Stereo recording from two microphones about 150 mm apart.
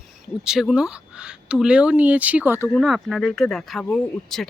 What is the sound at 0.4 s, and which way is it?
Speech, 5° right (ahead or behind).